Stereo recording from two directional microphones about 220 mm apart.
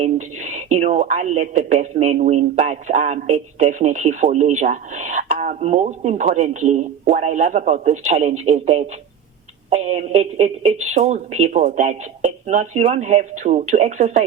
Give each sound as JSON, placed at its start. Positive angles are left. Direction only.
{"t": 0.0, "sound": "speech", "side_deg": -35}